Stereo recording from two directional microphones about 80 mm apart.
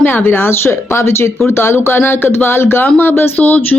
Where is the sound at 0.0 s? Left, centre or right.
Left.